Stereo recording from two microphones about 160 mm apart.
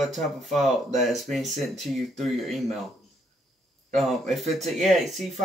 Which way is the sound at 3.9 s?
Centre (ahead or behind).